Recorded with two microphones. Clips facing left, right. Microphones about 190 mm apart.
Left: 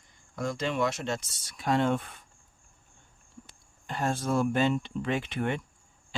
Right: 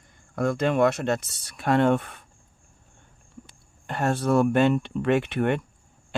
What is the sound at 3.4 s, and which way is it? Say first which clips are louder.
Speech: right 4 dB; 60° right (ahead or behind).